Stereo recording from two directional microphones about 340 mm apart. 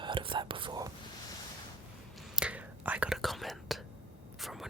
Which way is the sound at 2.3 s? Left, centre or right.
Centre.